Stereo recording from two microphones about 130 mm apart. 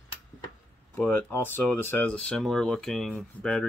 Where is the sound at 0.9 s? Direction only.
15° left (ahead or behind).